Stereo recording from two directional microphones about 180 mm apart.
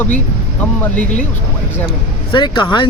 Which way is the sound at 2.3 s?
25° left (ahead or behind).